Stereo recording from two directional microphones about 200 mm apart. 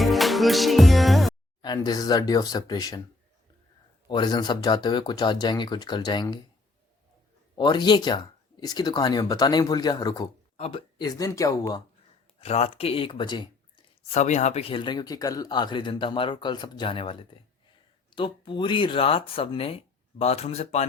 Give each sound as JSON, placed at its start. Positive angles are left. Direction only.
{"t": 0.0, "sound": "music", "side_deg": 0}
{"t": 1.6, "sound": "speech", "side_deg": 20}
{"t": 4.1, "sound": "speech", "side_deg": 20}
{"t": 7.5, "sound": "speech", "side_deg": 20}
{"t": 12.4, "sound": "speech", "side_deg": 30}
{"t": 14.1, "sound": "speech", "side_deg": 35}